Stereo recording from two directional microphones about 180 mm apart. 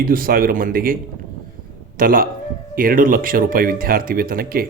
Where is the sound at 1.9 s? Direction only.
50° right (ahead or behind).